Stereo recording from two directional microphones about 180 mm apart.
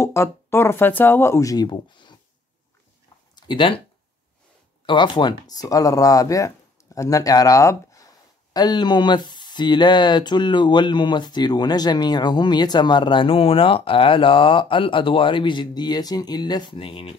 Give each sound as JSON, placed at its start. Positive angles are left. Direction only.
{"t": 0.0, "sound": "speech", "side_deg": 15}
{"t": 3.3, "sound": "speech", "side_deg": 25}
{"t": 4.8, "sound": "speech", "side_deg": 25}